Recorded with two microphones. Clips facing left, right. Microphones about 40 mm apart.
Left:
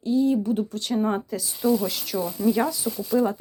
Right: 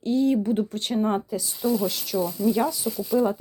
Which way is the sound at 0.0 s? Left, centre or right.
Right.